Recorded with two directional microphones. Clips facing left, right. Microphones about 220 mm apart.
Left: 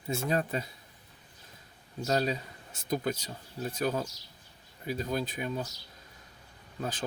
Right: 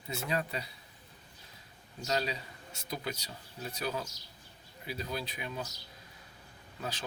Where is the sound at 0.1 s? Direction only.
45° left (ahead or behind).